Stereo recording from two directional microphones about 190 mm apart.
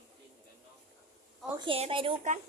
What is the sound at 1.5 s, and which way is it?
Speech, 30° right (ahead or behind).